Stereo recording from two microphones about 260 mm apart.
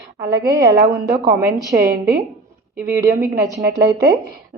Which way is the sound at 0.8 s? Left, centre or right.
Right.